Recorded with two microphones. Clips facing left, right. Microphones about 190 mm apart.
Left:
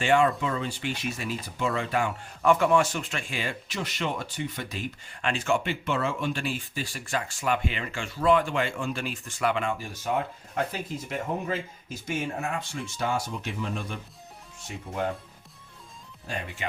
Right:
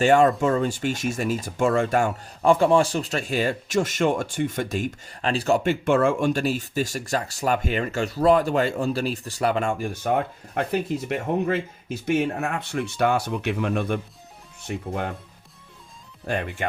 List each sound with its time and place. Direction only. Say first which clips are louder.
0.0 s speech: right 6 dB; 40° right (ahead or behind); by 15.1 s 60° right (ahead or behind)
16.2 s speech: right 8 dB; 60° right (ahead or behind)